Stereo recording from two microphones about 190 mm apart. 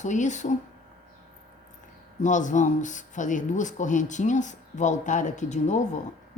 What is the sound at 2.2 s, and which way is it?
Speech, 40° left (ahead or behind).